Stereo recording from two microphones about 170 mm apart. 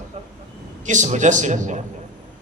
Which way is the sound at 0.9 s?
45° right (ahead or behind).